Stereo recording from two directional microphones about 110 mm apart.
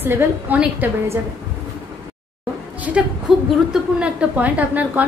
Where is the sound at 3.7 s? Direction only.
10° right (ahead or behind).